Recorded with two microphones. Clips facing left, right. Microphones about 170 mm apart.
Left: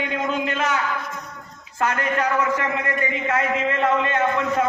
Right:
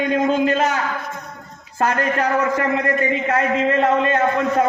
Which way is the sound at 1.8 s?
35° right (ahead or behind).